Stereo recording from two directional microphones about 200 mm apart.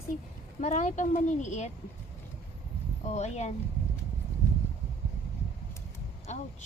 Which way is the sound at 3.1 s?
35° left (ahead or behind).